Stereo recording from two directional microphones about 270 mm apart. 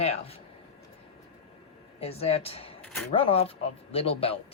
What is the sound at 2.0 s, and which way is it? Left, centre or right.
Speech, left.